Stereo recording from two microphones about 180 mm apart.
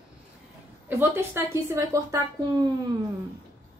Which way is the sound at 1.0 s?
15° right (ahead or behind).